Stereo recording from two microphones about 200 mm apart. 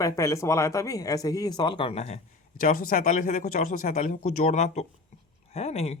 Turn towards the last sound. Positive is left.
turn(degrees=30)  # may be behind; listen again after turning